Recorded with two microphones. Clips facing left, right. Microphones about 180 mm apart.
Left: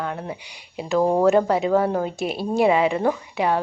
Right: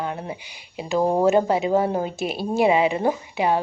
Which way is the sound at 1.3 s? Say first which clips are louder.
Left 1 dB; 25° right (ahead or behind).